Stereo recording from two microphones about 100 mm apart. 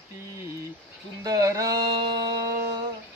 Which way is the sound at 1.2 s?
35° right (ahead or behind).